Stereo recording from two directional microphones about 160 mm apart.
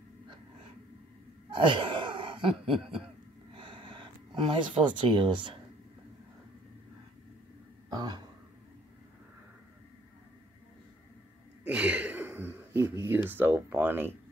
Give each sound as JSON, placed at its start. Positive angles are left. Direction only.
{"t": 1.5, "sound": "gasp", "side_deg": -30}
{"t": 2.6, "sound": "cough", "side_deg": -35}
{"t": 3.5, "sound": "a sound", "side_deg": -30}
{"t": 7.9, "sound": "speech", "side_deg": -25}
{"t": 11.6, "sound": "speech", "side_deg": -10}